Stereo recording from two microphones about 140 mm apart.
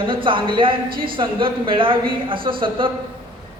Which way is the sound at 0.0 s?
35° right (ahead or behind).